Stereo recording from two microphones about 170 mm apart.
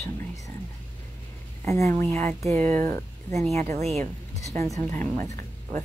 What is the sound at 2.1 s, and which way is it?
Speech, 40° right (ahead or behind).